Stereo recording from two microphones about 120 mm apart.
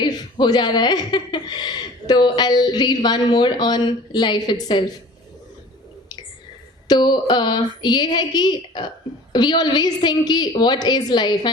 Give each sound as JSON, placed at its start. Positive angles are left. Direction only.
{"t": 0.0, "sound": "speech", "side_deg": 35}
{"t": 6.8, "sound": "speech", "side_deg": 35}